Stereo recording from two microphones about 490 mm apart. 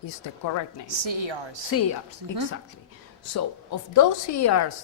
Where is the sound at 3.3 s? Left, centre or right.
Left.